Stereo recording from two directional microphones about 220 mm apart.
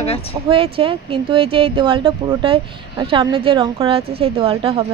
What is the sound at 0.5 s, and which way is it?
Speech, 25° right (ahead or behind).